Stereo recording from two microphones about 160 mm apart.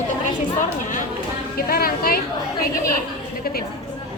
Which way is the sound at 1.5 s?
70° left (ahead or behind).